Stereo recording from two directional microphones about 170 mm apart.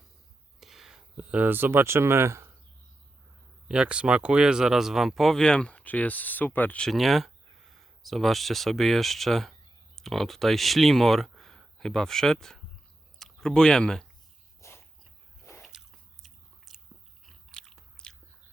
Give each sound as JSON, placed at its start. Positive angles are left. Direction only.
{"t": 0.6, "sound": "speech", "side_deg": 0}
{"t": 3.7, "sound": "speech", "side_deg": -5}
{"t": 14.6, "sound": "dog", "side_deg": 15}
{"t": 16.2, "sound": "biting", "side_deg": 0}